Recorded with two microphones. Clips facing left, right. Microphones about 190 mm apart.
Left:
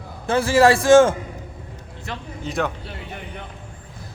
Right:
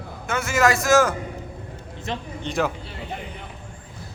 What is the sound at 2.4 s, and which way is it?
Speech, centre (ahead or behind).